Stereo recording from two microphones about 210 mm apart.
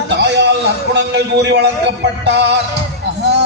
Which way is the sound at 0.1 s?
55° right (ahead or behind).